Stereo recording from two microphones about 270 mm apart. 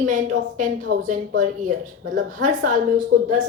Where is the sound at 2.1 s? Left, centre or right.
Right.